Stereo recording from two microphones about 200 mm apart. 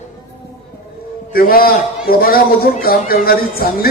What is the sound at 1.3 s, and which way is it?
A man's voice, 50° left (ahead or behind).